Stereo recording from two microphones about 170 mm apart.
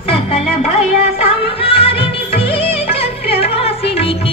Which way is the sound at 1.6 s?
35° left (ahead or behind).